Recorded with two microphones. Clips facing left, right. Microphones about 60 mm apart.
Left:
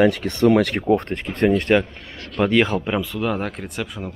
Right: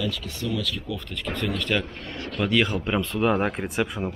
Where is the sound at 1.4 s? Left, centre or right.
Left.